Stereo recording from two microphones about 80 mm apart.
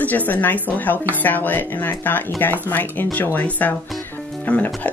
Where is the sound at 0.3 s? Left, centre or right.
Left.